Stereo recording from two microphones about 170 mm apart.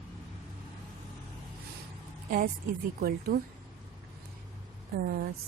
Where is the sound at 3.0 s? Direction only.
65° right (ahead or behind).